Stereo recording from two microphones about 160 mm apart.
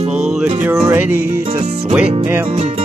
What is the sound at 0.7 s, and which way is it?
Music, 15° right (ahead or behind).